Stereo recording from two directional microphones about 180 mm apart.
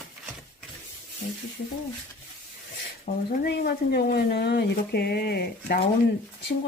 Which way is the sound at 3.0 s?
55° left (ahead or behind).